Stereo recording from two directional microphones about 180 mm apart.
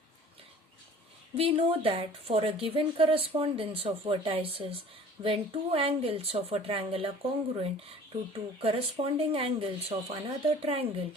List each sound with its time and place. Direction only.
1.4 s a woman's voice: 30° right (ahead or behind)